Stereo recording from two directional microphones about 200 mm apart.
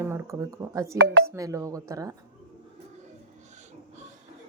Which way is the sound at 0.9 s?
55° right (ahead or behind).